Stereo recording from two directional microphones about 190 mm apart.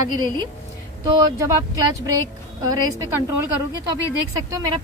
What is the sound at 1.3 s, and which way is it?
Speech, 15° right (ahead or behind).